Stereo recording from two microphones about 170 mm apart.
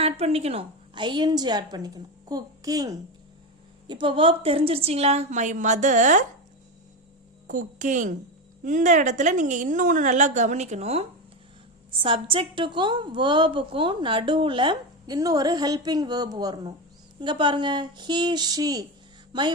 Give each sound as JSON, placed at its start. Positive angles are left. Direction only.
{"t": 0.0, "sound": "a woman's voice", "side_deg": -35}
{"t": 7.4, "sound": "a woman's voice", "side_deg": -50}